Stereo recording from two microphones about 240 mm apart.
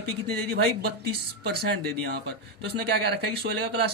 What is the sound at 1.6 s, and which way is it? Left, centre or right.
A man's voice, right.